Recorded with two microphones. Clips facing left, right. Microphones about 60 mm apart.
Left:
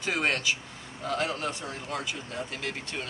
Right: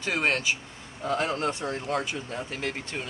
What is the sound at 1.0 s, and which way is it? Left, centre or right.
Speech, right.